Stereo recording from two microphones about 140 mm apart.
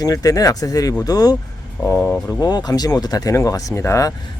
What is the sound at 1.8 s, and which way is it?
Speech, 10° left (ahead or behind).